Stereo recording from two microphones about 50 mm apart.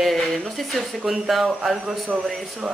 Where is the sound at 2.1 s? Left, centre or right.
Centre.